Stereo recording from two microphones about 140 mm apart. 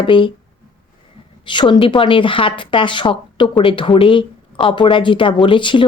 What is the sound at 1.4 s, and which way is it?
Speech, 35° left (ahead or behind).